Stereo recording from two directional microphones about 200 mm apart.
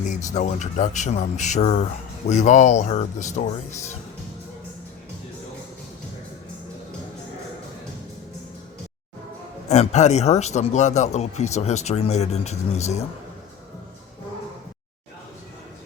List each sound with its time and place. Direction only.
0.0 s speech: 35° left (ahead or behind)
9.6 s speech: 35° left (ahead or behind)